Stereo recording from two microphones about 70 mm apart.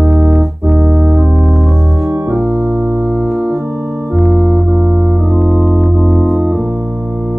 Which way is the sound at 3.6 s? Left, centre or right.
Right.